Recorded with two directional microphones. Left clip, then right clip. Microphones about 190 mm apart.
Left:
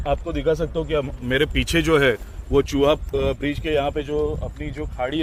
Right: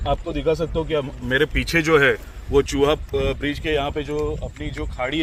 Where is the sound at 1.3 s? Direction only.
45° left (ahead or behind).